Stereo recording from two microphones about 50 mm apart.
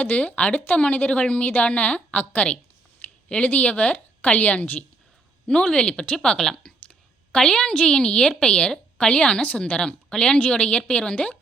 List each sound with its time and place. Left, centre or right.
0.0 s a woman's voice: left
5.5 s a woman's voice: centre